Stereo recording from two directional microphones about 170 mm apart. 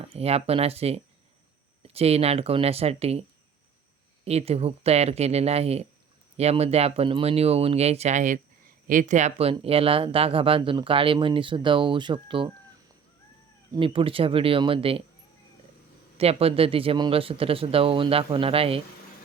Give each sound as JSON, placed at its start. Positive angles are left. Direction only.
{"t": 0.0, "sound": "speech", "side_deg": -35}
{"t": 4.3, "sound": "speech", "side_deg": -40}
{"t": 13.7, "sound": "speech", "side_deg": -30}
{"t": 16.1, "sound": "speech", "side_deg": -35}